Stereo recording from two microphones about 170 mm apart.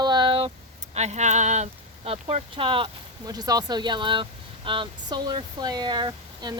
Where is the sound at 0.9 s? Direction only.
40° right (ahead or behind).